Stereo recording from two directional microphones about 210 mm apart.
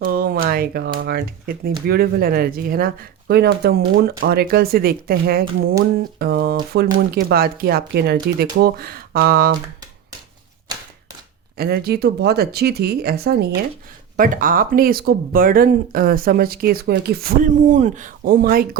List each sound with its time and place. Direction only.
0.0 s speech: 45° right (ahead or behind)
11.5 s speech: 50° right (ahead or behind)